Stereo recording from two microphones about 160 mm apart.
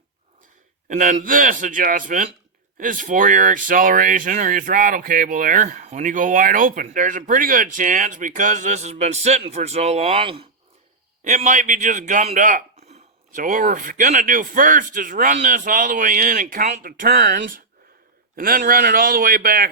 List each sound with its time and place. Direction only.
0.9 s speech: 55° right (ahead or behind); by 10.4 s 35° right (ahead or behind)
11.2 s speech: 50° right (ahead or behind); by 19.7 s 65° right (ahead or behind)